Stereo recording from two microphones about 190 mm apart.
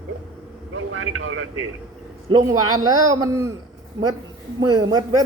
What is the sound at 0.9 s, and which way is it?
Speech, 90° right.